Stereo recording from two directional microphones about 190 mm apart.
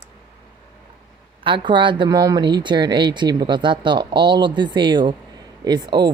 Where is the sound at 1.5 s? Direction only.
25° right (ahead or behind).